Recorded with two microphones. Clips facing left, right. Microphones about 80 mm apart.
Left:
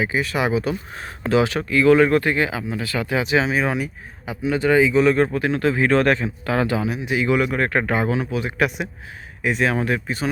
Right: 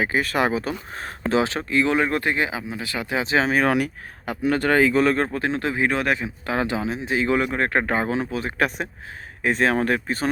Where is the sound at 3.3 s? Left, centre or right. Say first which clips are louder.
Right 2 dB; right.